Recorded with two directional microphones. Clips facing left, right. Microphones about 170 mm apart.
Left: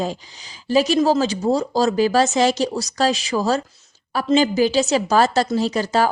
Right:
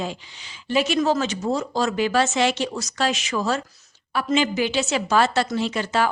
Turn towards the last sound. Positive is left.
turn(degrees=40)  # may be behind; listen again after turning